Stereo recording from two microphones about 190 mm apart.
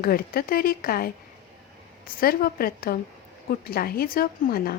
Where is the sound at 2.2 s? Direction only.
50° left (ahead or behind).